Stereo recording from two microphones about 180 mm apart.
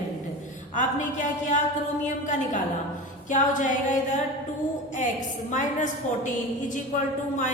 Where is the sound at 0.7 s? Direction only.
45° left (ahead or behind).